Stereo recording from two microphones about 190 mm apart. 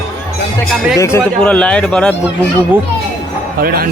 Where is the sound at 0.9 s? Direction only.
15° left (ahead or behind).